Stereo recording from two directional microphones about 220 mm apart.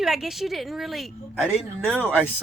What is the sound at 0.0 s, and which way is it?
A woman's voice, centre (ahead or behind).